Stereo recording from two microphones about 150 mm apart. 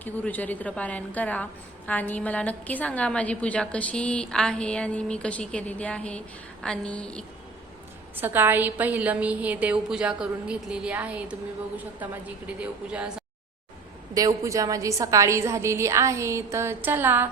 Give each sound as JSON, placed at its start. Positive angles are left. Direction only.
{"t": 0.0, "sound": "a woman's voice", "side_deg": 10}
{"t": 8.1, "sound": "a woman's voice", "side_deg": -15}
{"t": 12.5, "sound": "a woman's voice", "side_deg": -5}
{"t": 14.1, "sound": "a woman's voice", "side_deg": -25}